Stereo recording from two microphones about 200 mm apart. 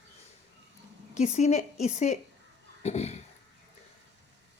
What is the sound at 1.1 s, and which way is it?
Speech, 35° left (ahead or behind).